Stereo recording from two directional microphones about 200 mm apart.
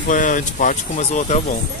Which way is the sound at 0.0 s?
40° left (ahead or behind).